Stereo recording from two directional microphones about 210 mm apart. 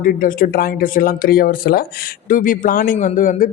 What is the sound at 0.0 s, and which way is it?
A man's voice, 40° left (ahead or behind).